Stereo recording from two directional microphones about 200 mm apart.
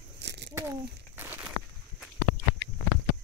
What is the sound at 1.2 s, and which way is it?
Walk, 10° right (ahead or behind).